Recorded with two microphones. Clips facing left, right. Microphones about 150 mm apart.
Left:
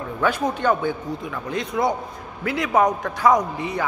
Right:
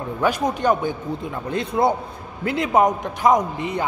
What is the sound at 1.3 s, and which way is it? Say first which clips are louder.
A man's voice: right 2 dB; 30° right (ahead or behind).